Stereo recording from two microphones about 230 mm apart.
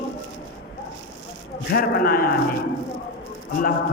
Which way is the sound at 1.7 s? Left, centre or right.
Left.